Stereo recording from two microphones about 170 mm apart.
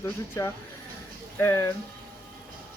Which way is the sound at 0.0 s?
15° left (ahead or behind).